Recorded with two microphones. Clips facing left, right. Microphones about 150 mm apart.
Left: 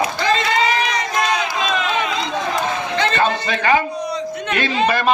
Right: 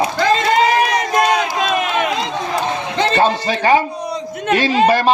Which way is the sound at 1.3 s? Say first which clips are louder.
Right 4 dB; 55° right (ahead or behind).